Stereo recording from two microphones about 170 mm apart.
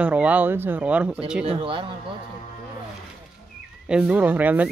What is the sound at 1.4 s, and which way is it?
Speech, 35° right (ahead or behind).